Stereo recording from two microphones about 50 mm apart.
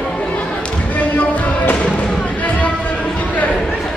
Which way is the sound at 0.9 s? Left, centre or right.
Left.